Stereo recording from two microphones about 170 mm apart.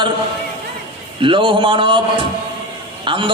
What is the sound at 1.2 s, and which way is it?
A man's voice, 30° right (ahead or behind).